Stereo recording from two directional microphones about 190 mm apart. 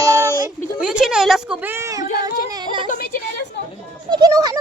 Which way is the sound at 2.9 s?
50° left (ahead or behind).